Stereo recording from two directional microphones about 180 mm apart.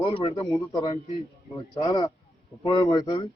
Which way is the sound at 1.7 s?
20° left (ahead or behind).